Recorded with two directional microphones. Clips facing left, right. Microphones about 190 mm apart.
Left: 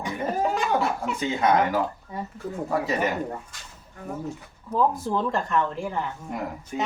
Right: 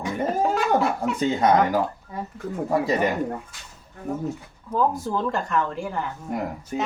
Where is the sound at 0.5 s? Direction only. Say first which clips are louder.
Right 3 dB; centre (ahead or behind).